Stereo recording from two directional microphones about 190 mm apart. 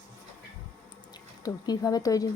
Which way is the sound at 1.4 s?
20° left (ahead or behind).